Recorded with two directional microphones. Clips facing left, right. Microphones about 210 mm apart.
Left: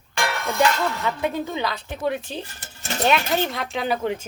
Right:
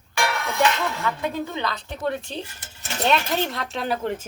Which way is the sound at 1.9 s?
5° left (ahead or behind).